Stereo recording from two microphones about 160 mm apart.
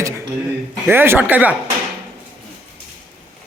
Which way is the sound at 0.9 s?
15° right (ahead or behind).